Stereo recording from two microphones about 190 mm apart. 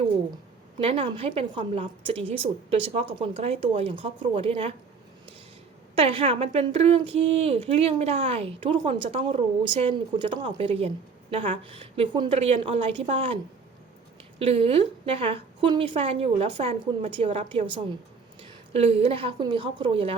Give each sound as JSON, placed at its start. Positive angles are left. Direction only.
{"t": 0.8, "sound": "speech", "side_deg": -30}
{"t": 6.0, "sound": "speech", "side_deg": -30}